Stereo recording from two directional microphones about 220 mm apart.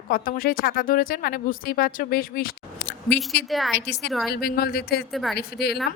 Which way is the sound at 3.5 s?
Centre (ahead or behind).